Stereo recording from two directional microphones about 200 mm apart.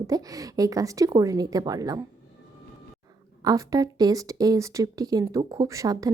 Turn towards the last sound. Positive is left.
turn(degrees=-15)  # may be behind; listen again after turning